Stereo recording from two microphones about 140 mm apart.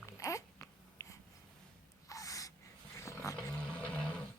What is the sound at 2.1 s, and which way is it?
Gasp, 25° left (ahead or behind).